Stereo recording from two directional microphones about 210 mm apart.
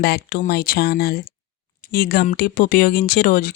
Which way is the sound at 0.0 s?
45° left (ahead or behind).